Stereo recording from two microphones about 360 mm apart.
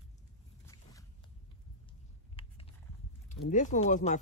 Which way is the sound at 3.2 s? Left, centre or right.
Left.